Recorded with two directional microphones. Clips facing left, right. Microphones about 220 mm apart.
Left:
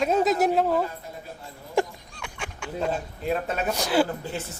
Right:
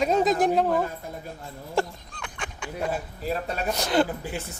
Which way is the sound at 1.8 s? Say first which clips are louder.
Left 2 dB; 10° left (ahead or behind).